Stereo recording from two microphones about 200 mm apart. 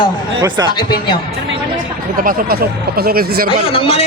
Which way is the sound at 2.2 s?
50° right (ahead or behind).